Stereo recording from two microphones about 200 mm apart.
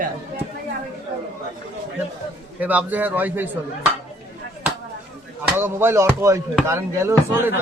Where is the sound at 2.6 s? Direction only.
10° right (ahead or behind).